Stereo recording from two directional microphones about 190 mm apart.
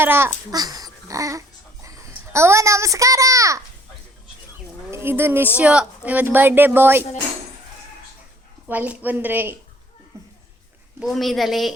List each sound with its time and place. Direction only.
0.0 s a child's voice: 10° right (ahead or behind)
4.9 s a woman's voice: 10° right (ahead or behind)
8.6 s speech: 5° right (ahead or behind)
10.1 s a sound: 15° right (ahead or behind)
11.0 s a woman's voice: centre (ahead or behind)